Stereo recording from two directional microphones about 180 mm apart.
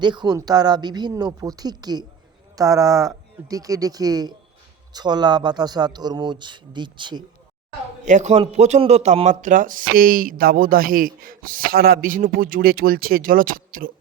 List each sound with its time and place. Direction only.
0.0 s speech: 25° right (ahead or behind)
8.0 s speech: 40° right (ahead or behind)